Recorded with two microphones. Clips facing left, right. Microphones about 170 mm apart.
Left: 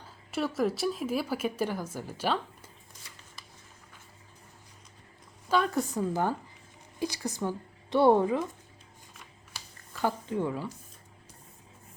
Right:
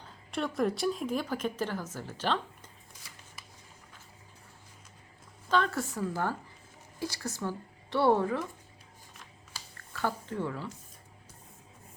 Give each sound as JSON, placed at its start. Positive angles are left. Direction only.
{"t": 0.3, "sound": "a woman's voice", "side_deg": 5}
{"t": 5.5, "sound": "a woman's voice", "side_deg": 10}
{"t": 9.9, "sound": "speech", "side_deg": 15}